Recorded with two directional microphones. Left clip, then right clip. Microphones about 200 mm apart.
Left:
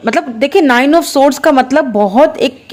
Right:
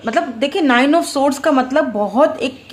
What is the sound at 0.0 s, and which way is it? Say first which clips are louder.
Speech: left 5 dB; 40° left (ahead or behind).